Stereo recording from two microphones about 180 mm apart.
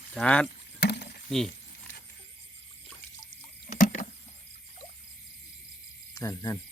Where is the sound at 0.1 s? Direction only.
5° left (ahead or behind).